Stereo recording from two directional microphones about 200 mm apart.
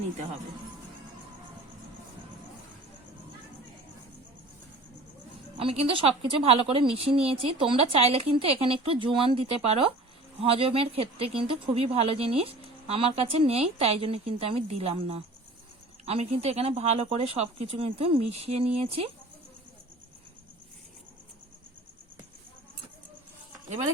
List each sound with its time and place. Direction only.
5.5 s speech: 30° right (ahead or behind)